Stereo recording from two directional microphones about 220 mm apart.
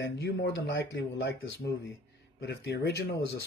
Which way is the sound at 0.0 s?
45° left (ahead or behind).